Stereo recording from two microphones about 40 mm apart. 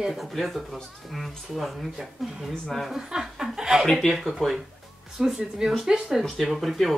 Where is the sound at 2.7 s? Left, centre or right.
Centre.